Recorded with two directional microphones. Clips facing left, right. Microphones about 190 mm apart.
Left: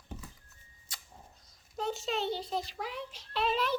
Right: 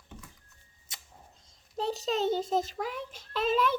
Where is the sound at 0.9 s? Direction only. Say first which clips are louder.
Even; 20° right (ahead or behind).